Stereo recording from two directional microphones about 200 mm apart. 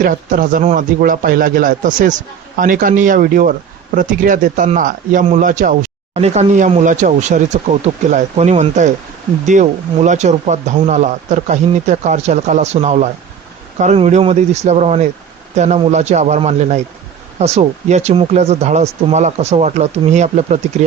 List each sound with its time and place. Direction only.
0.0 s speech: 40° right (ahead or behind)